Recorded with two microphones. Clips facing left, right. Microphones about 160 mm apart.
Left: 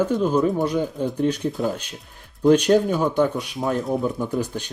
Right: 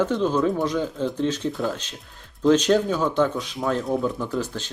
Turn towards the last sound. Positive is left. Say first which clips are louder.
# left 2 dB
turn(degrees=15)  # may be behind; listen again after turning